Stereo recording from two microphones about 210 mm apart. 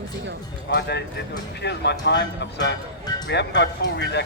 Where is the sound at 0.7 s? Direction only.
50° left (ahead or behind).